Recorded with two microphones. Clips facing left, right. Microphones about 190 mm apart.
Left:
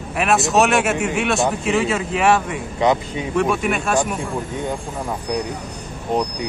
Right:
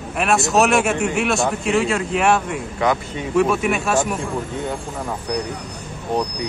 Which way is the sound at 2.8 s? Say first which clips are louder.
Left 2 dB; 20° left (ahead or behind).